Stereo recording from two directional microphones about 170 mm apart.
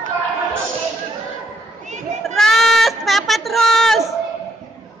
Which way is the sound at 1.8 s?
45° right (ahead or behind).